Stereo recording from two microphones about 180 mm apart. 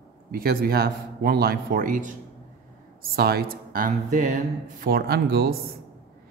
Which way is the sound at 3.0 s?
60° right (ahead or behind).